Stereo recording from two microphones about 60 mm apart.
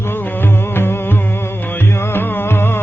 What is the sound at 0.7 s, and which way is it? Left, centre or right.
Music, left.